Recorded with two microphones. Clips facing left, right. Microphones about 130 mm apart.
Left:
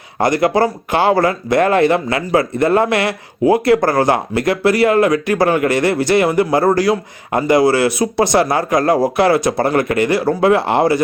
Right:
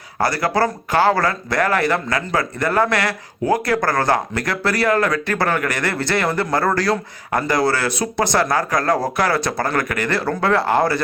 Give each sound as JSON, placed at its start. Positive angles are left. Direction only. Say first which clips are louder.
{"t": 0.2, "sound": "speech", "louder": "left 5 dB", "side_deg": 20}